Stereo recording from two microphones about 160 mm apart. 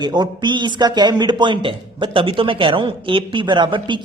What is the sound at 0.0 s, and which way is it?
A man's voice, 25° right (ahead or behind).